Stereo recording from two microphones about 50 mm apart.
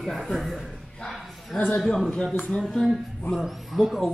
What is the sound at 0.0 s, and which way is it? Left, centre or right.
Speech, centre.